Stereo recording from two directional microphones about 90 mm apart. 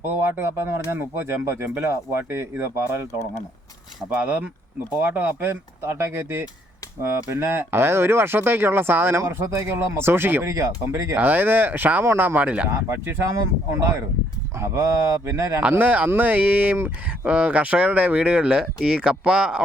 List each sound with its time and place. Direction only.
0.3 s speech: 25° right (ahead or behind)
4.1 s speech: 15° right (ahead or behind)
5.8 s speech: 30° right (ahead or behind)
12.6 s speech: 30° right (ahead or behind)
15.1 s speech: 35° right (ahead or behind)
15.7 s speech: 20° right (ahead or behind)